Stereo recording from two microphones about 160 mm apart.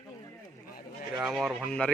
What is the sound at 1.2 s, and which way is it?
Speech, centre (ahead or behind).